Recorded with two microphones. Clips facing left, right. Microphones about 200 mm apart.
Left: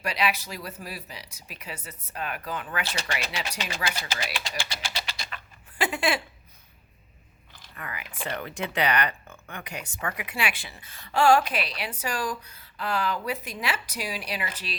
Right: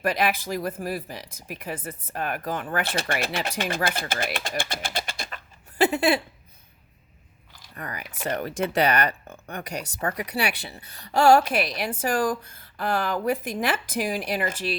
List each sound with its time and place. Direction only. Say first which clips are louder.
0.0 s speech: right 4 dB; 50° right (ahead or behind)
7.8 s speech: right 3 dB; 40° right (ahead or behind)